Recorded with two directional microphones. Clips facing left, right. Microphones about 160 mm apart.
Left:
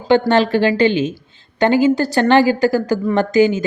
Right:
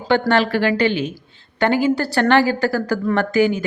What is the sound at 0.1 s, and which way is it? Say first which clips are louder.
A woman's voice: left 3 dB; 20° left (ahead or behind).